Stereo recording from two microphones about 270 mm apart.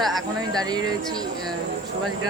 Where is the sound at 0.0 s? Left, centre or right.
Centre.